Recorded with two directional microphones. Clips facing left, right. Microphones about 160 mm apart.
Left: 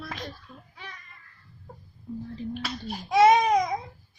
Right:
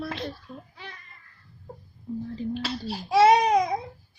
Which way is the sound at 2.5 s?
30° right (ahead or behind).